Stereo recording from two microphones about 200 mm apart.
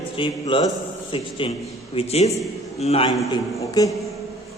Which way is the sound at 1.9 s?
30° left (ahead or behind).